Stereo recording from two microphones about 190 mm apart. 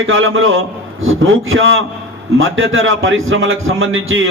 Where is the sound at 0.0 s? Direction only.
90° right.